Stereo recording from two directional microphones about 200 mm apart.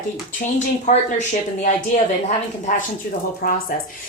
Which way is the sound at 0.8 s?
35° left (ahead or behind).